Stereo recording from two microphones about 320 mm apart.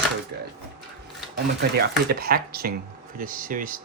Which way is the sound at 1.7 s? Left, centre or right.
Right.